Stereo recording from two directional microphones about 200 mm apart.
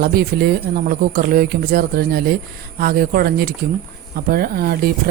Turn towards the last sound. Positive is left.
turn(degrees=-50)  # may be behind; listen again after turning